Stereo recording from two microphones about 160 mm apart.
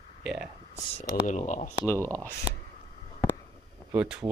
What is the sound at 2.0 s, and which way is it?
Speech, 10° left (ahead or behind).